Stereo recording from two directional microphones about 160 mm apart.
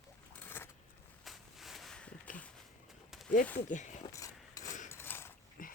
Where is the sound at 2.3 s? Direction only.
55° left (ahead or behind).